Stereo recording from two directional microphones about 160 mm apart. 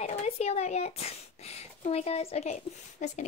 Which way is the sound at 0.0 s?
40° left (ahead or behind).